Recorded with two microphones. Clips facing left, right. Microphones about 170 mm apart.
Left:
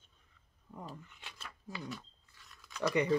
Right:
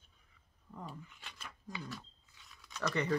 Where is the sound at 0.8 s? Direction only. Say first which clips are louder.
Right 1 dB; centre (ahead or behind).